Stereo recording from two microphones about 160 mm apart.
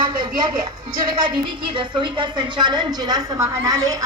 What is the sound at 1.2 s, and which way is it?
A woman's voice, 30° right (ahead or behind).